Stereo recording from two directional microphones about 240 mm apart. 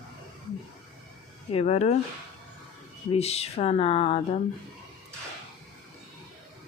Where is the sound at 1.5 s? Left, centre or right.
Left.